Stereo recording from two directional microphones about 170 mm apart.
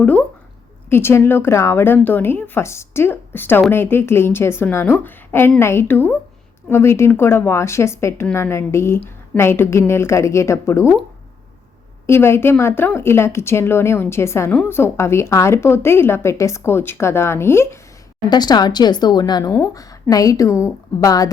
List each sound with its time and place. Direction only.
0.0 s speech: 10° left (ahead or behind)
12.0 s a woman's voice: 15° left (ahead or behind)